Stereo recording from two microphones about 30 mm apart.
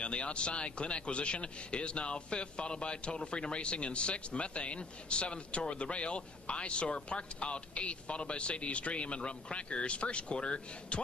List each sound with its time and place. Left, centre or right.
0.0 s speech: left